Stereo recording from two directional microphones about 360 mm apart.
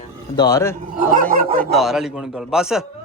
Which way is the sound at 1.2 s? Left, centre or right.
Right.